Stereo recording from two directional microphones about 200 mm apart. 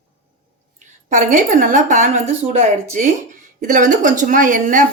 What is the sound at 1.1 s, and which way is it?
A woman's voice, 40° right (ahead or behind).